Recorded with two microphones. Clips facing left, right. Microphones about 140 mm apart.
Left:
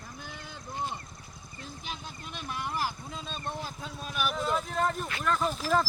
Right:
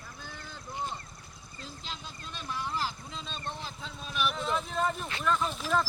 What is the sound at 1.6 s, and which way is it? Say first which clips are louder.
Vehicle: left 2 dB; 15° left (ahead or behind).